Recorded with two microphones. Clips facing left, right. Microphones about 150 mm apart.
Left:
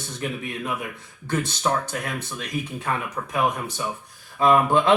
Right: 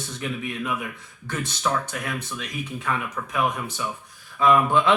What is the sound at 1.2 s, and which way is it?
Speech, 30° left (ahead or behind).